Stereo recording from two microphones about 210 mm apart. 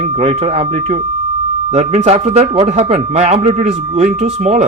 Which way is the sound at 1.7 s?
30° right (ahead or behind).